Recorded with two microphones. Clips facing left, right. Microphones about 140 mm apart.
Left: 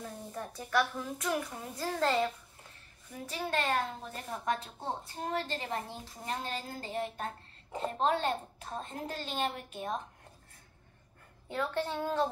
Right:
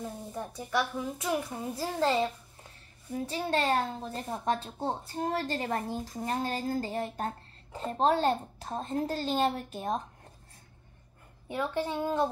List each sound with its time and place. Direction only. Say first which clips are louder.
0.0 s a woman's voice: right 3 dB; 15° right (ahead or behind)
3.1 s speech: right 5 dB; 35° right (ahead or behind)
11.4 s a child's voice: right 2 dB; 15° right (ahead or behind)